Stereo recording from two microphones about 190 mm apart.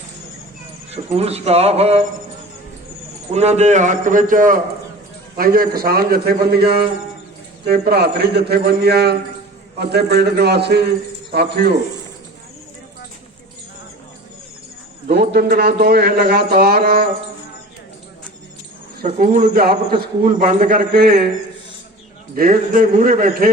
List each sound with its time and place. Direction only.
0.9 s a man's voice: 35° right (ahead or behind)
3.3 s a man's voice: 35° right (ahead or behind); by 11.7 s 60° right (ahead or behind)
15.0 s a man's voice: 55° right (ahead or behind)
19.0 s a man's voice: 45° right (ahead or behind)
22.4 s a man's voice: 50° right (ahead or behind)